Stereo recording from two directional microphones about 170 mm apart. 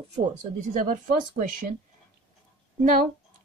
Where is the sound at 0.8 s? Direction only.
55° right (ahead or behind).